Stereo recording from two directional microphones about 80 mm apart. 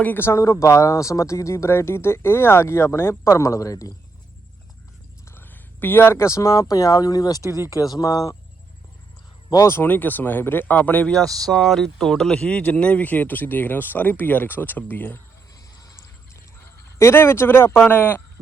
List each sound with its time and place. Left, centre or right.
0.0 s speech: left
5.3 s speech: left
9.6 s speech: left
11.1 s speech: centre; by 15.2 s left
15.7 s mechanisms: left
17.0 s speech: left